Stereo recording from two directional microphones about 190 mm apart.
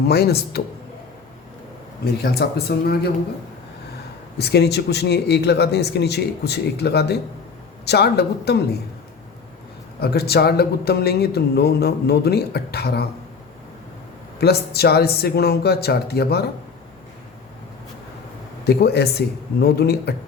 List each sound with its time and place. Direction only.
0.1 s a man's voice: 55° left (ahead or behind)
2.2 s a man's voice: 55° left (ahead or behind)
4.4 s a man's voice: 60° left (ahead or behind)
10.0 s a man's voice: 55° left (ahead or behind)
14.3 s a man's voice: 55° left (ahead or behind)
18.6 s a man's voice: 60° left (ahead or behind)